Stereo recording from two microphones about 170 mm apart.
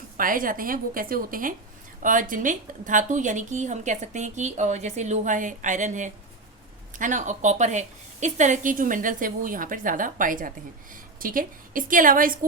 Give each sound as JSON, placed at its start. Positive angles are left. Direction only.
{"t": 0.2, "sound": "a woman's voice", "side_deg": -55}